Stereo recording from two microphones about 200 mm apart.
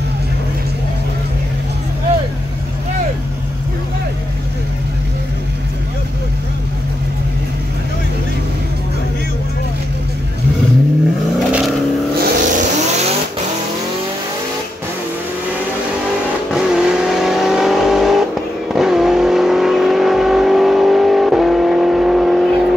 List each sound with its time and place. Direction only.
11.3 s vehicle: centre (ahead or behind)
12.2 s vehicle: 35° right (ahead or behind)
16.4 s vehicle: centre (ahead or behind)